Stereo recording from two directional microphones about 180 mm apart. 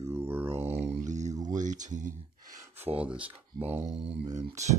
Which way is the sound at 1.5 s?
45° right (ahead or behind).